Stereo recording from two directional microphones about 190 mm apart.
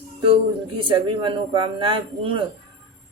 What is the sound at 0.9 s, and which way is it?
Speech, 25° right (ahead or behind).